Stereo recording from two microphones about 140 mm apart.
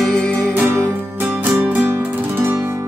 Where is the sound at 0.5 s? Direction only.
10° right (ahead or behind).